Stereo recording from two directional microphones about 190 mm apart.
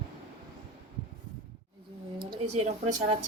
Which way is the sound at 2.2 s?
35° right (ahead or behind).